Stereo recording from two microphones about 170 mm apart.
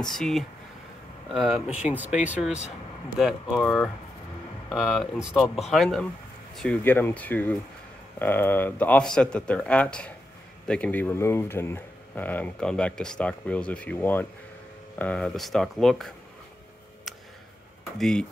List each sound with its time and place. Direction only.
0.0 s speech: centre (ahead or behind)
17.9 s speech: 5° left (ahead or behind)